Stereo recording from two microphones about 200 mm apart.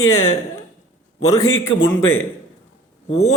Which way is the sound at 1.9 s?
10° left (ahead or behind).